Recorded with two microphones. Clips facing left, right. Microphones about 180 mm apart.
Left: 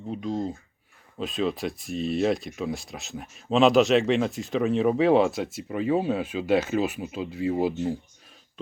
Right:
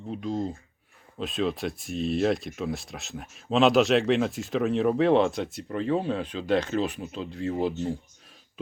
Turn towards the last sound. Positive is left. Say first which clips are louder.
# left 2 dB
turn(degrees=10)  # may be behind; listen again after turning